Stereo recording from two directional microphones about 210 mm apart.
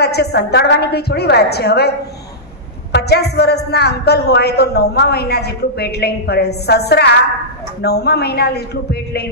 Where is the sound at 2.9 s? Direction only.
50° left (ahead or behind).